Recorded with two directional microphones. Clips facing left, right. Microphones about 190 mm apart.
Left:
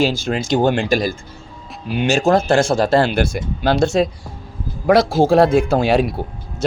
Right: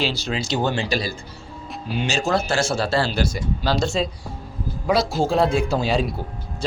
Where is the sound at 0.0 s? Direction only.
50° left (ahead or behind).